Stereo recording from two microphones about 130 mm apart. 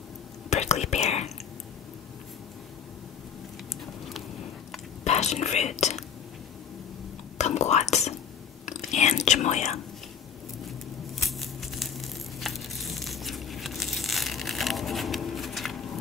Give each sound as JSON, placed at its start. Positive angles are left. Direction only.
{"t": 0.5, "sound": "whispering", "side_deg": 60}
{"t": 5.0, "sound": "speech", "side_deg": 55}
{"t": 7.3, "sound": "whispering", "side_deg": 60}
{"t": 11.1, "sound": "crumpling", "side_deg": 0}